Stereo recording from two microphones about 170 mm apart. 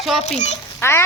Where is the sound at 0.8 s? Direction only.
15° left (ahead or behind).